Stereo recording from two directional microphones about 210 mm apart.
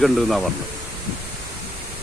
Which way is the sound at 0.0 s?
Centre (ahead or behind).